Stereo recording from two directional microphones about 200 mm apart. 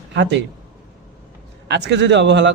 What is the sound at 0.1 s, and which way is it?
Speech, 65° right (ahead or behind).